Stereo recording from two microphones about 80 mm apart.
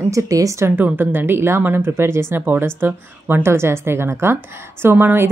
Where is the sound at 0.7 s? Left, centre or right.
Right.